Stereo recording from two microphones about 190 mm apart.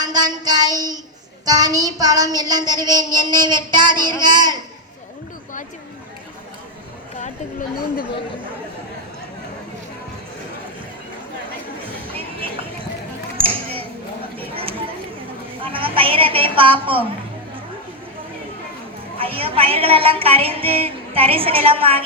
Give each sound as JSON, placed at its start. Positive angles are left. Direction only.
{"t": 0.0, "sound": "a woman's voice", "side_deg": -20}
{"t": 3.9, "sound": "a child's voice", "side_deg": 10}
{"t": 4.2, "sound": "a woman's voice", "side_deg": -20}
{"t": 12.1, "sound": "a sound", "side_deg": -30}
{"t": 15.6, "sound": "a woman's voice", "side_deg": -30}
{"t": 19.2, "sound": "a woman's voice", "side_deg": -30}